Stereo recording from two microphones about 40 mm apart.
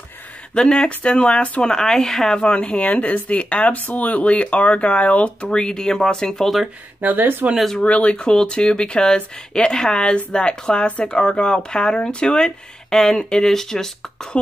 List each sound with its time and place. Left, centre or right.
0.6 s speech: left
1.6 s speech: centre
2.3 s speech: left
7.0 s speech: right
7.8 s speech: left
12.9 s speech: centre
14.3 s speech: left